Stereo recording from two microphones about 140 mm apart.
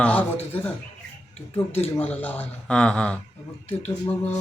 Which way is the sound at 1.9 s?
10° left (ahead or behind).